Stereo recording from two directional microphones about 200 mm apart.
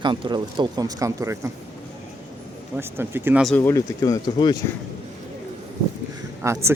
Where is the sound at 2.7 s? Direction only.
10° right (ahead or behind).